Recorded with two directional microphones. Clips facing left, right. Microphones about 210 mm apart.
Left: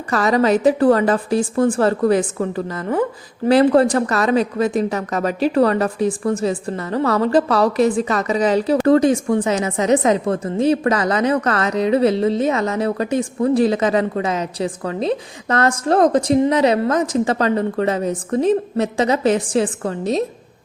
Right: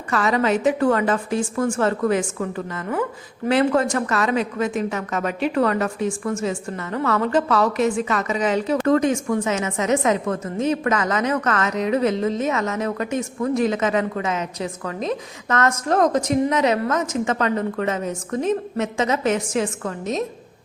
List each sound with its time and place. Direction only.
0.1 s a woman's voice: 35° left (ahead or behind)